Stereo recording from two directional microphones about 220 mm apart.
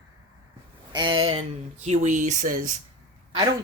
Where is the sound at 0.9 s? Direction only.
20° right (ahead or behind); by 2.8 s 40° right (ahead or behind).